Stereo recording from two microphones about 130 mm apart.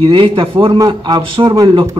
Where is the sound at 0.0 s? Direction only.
40° right (ahead or behind).